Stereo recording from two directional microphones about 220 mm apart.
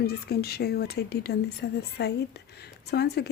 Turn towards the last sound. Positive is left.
turn(degrees=45)  # may be behind; listen again after turning